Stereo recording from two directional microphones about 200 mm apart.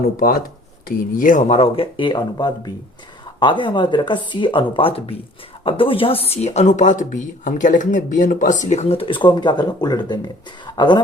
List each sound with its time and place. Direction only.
0.2 s speech: 45° left (ahead or behind); by 11.0 s 20° left (ahead or behind)